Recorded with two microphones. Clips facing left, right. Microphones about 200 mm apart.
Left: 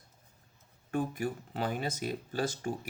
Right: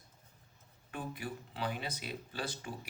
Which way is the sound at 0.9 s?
45° left (ahead or behind).